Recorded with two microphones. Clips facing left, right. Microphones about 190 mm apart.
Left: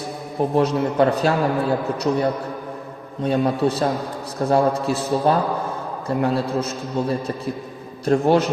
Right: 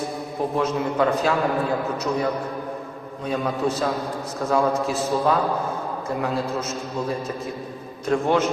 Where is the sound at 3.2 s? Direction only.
30° left (ahead or behind).